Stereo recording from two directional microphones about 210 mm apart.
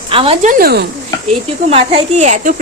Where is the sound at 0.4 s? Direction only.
45° right (ahead or behind).